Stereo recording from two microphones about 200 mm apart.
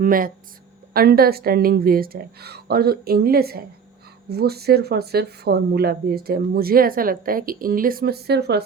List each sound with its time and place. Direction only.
0.0 s speech: 45° right (ahead or behind)